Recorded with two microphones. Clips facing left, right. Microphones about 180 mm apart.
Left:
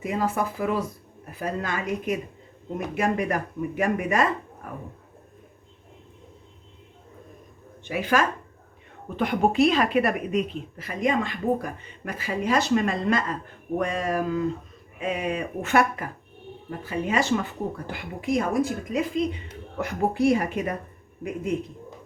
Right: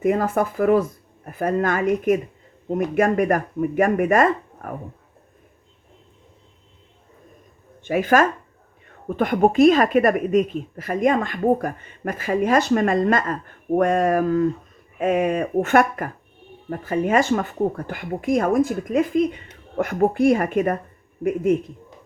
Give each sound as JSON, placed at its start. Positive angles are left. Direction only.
{"t": 0.0, "sound": "a woman's voice", "side_deg": -50}
{"t": 7.9, "sound": "a woman's voice", "side_deg": -50}